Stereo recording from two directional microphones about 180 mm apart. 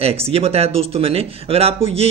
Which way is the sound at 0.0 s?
35° right (ahead or behind).